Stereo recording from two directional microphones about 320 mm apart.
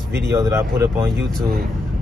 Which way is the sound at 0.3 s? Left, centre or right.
Centre.